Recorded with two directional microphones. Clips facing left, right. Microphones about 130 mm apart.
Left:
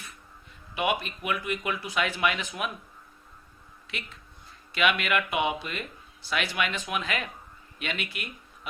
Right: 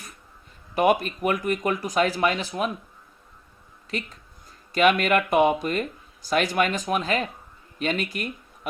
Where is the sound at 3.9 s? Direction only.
40° right (ahead or behind).